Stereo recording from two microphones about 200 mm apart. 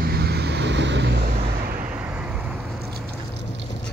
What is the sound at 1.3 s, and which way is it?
Vehicle, 45° right (ahead or behind).